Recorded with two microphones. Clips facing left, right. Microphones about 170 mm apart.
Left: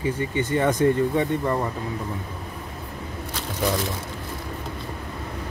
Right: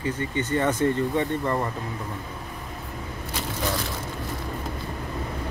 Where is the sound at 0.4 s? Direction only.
15° left (ahead or behind).